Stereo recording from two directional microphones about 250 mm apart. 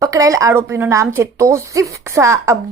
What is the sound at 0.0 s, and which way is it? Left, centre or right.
A woman's voice, centre.